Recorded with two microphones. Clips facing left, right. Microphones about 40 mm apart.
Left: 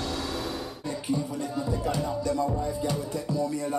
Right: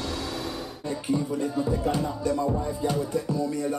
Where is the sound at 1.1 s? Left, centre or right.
Right.